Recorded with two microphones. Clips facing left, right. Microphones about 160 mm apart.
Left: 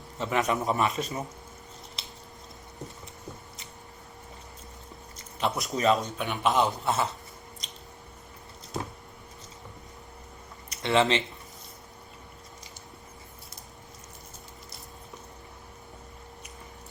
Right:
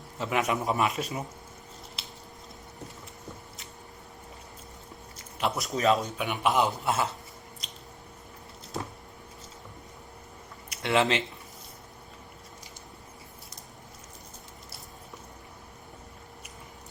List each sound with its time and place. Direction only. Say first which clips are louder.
0.2 s a man's voice: left 1 dB; 5° right (ahead or behind)
2.0 s a sound: even; 5° right (ahead or behind)
5.4 s a man's voice: even; centre (ahead or behind)
10.7 s speech: left 1 dB; 5° right (ahead or behind)